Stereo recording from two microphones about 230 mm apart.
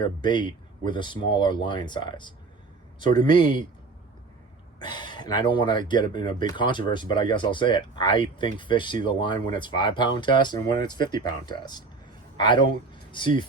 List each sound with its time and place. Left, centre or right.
0.0 s speech: centre
4.8 s speech: centre